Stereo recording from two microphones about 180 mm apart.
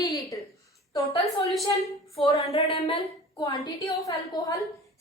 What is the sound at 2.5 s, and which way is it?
A woman's voice, 30° left (ahead or behind).